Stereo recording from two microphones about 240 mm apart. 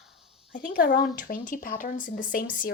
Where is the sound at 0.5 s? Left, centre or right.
Left.